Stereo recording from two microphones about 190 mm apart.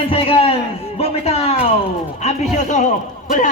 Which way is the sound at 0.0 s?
30° left (ahead or behind).